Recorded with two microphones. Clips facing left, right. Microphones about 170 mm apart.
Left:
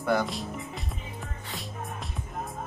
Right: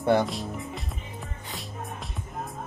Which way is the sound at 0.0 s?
25° right (ahead or behind).